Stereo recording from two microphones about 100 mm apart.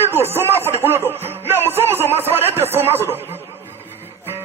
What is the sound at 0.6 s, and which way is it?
Music, 20° right (ahead or behind).